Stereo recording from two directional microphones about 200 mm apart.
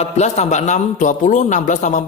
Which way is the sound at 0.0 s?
35° left (ahead or behind).